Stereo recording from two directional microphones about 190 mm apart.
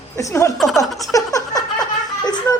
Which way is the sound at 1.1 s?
20° left (ahead or behind).